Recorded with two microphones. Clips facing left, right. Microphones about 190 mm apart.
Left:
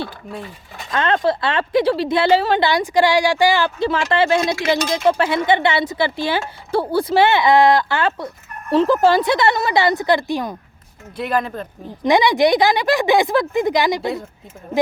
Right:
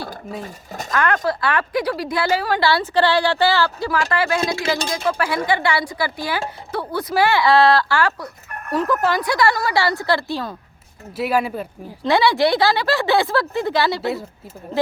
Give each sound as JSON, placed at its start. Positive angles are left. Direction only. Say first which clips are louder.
{"t": 0.4, "sound": "speech", "louder": "right 4 dB", "side_deg": -45}
{"t": 0.9, "sound": "a woman's voice", "louder": "left 2 dB", "side_deg": 25}
{"t": 11.2, "sound": "speech", "louder": "right 1 dB", "side_deg": -10}
{"t": 12.0, "sound": "speech", "louder": "left 2 dB", "side_deg": 15}